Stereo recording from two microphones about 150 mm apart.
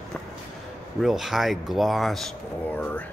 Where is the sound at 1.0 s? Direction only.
Centre (ahead or behind).